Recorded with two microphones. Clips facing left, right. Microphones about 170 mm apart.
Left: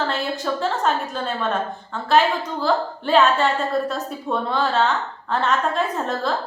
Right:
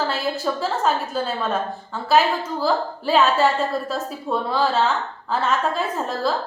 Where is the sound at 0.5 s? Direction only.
5° right (ahead or behind).